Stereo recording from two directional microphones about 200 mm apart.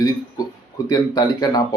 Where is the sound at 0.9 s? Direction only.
20° left (ahead or behind).